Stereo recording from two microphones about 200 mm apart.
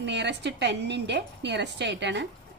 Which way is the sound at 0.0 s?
60° right (ahead or behind).